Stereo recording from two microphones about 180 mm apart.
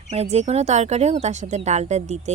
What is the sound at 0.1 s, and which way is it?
Speech, 35° right (ahead or behind).